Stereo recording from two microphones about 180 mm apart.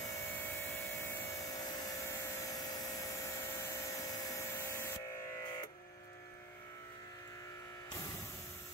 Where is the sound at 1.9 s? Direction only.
15° left (ahead or behind).